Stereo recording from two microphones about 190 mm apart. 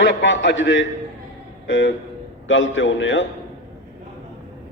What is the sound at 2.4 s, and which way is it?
Speech, 90° left.